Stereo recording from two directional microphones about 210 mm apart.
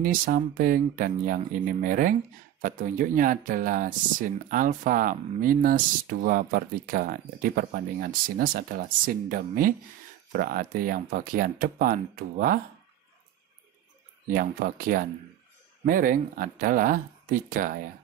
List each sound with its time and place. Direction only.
0.0 s speech: 40° right (ahead or behind)
14.2 s speech: 40° right (ahead or behind)